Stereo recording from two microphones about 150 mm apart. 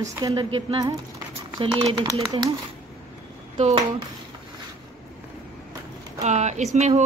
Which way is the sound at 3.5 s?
45° right (ahead or behind).